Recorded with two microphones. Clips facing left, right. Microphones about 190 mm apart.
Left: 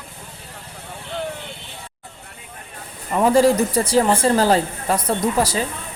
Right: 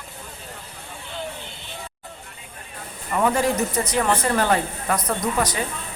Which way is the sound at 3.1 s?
30° left (ahead or behind).